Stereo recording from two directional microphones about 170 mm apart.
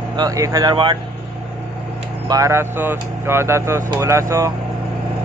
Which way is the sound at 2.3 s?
15° right (ahead or behind).